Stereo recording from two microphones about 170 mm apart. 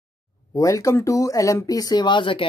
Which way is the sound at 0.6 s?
20° left (ahead or behind).